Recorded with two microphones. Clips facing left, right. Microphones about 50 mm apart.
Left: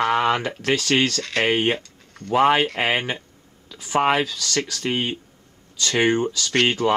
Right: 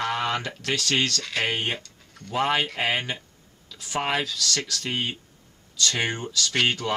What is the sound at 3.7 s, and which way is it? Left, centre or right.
Speech, centre.